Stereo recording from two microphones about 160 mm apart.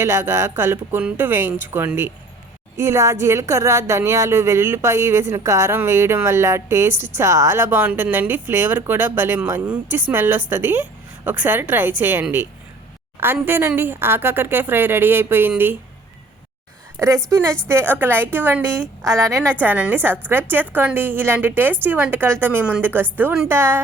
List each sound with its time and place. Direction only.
0.0 s a woman's voice: 15° right (ahead or behind)
17.2 s a woman's voice: 20° right (ahead or behind)